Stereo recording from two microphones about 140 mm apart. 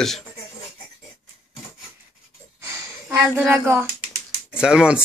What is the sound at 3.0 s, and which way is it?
Speech, 15° right (ahead or behind).